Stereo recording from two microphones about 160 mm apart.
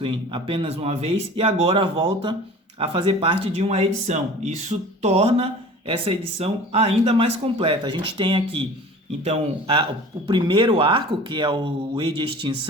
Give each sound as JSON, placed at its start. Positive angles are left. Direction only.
{"t": 0.0, "sound": "speech", "side_deg": -30}
{"t": 10.2, "sound": "speech", "side_deg": -30}